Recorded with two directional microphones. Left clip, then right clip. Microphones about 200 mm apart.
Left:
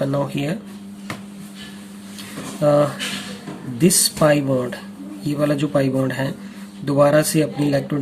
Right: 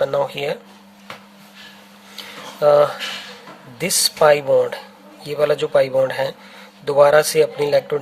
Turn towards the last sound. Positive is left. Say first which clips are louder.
# right 4 dB
turn(degrees=-35)  # may be behind; listen again after turning